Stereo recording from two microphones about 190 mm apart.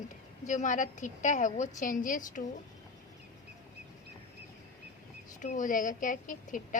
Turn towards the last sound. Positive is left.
turn(degrees=45)  # may be behind; listen again after turning